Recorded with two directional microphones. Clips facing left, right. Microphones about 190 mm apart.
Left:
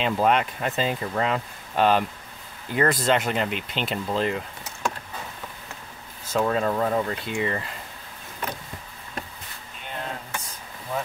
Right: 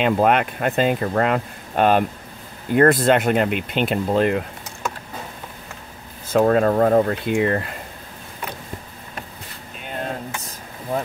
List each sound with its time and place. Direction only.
0.0 s speech: 60° right (ahead or behind)
6.3 s speech: 50° right (ahead or behind)